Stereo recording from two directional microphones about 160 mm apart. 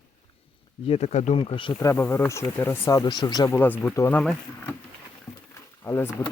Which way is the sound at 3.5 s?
10° left (ahead or behind).